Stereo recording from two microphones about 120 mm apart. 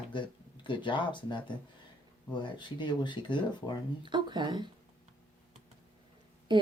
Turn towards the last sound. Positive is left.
turn(degrees=-40)  # may be behind; listen again after turning